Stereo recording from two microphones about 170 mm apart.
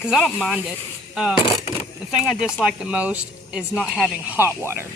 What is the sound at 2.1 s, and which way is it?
Speech, 5° right (ahead or behind).